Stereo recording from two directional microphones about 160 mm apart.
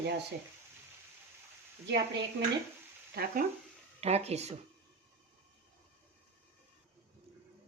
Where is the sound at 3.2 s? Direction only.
80° right.